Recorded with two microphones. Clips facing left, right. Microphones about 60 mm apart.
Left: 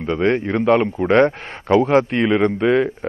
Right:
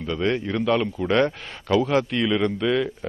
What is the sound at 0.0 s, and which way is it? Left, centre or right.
Speech, left.